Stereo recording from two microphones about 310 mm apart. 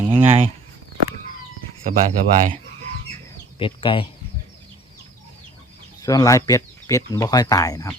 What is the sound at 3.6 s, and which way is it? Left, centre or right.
Speech, centre.